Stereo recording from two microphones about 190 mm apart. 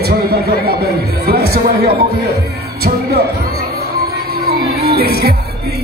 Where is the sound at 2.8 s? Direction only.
55° right (ahead or behind).